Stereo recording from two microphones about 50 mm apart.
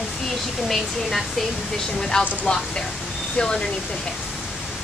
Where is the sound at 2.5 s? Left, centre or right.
Left.